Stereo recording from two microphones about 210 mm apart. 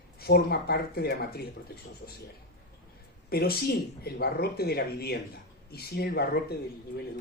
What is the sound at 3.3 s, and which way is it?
Speech, 50° left (ahead or behind).